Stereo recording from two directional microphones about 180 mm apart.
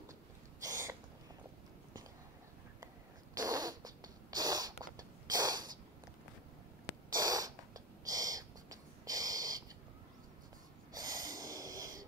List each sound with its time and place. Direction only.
0.7 s owl: 15° right (ahead or behind)
3.3 s a sound: 20° right (ahead or behind)
7.2 s owl: 20° right (ahead or behind)
11.0 s snort: 20° right (ahead or behind)